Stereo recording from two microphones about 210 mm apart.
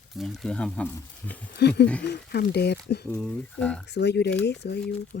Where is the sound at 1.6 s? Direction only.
55° left (ahead or behind).